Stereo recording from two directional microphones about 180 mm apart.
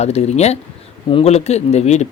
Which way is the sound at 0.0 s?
35° left (ahead or behind).